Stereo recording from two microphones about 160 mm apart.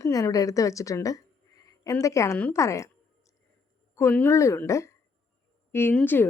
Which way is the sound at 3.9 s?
15° left (ahead or behind).